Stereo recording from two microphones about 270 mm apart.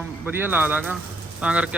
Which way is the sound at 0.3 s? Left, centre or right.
Centre.